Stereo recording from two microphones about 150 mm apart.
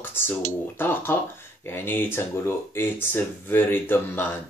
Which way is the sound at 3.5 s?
15° left (ahead or behind).